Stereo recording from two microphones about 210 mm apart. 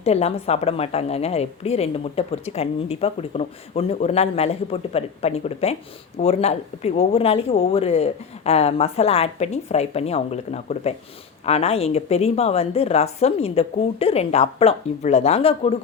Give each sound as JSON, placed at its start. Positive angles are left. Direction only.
{"t": 0.0, "sound": "a woman's voice", "side_deg": 30}